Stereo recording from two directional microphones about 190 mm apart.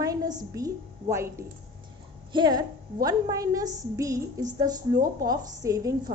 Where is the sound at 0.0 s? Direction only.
20° right (ahead or behind).